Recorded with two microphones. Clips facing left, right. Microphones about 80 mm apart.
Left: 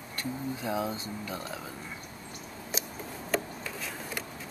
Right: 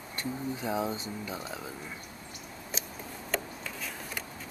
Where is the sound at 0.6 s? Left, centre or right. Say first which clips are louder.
Even; centre.